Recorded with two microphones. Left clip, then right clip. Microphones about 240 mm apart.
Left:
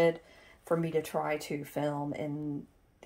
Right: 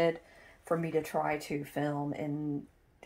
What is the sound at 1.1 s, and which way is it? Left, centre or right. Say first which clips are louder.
Speech: even; centre.